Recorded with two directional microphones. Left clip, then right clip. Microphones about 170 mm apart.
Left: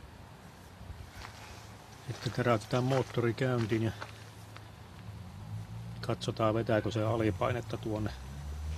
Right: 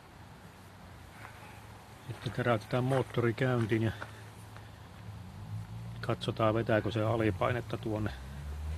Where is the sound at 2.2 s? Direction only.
25° left (ahead or behind).